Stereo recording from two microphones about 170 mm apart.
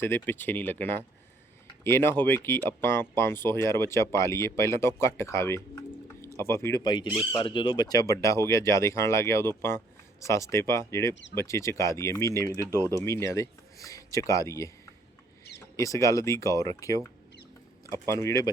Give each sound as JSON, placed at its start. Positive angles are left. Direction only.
{"t": 0.0, "sound": "speech", "side_deg": 10}
{"t": 11.1, "sound": "speech", "side_deg": 90}
{"t": 11.3, "sound": "speech", "side_deg": 15}
{"t": 15.7, "sound": "speech", "side_deg": 20}